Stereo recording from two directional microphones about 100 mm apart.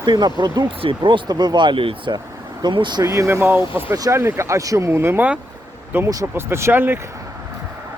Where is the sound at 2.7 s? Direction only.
50° right (ahead or behind).